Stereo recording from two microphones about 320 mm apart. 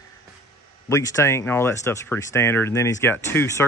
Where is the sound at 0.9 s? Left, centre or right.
Centre.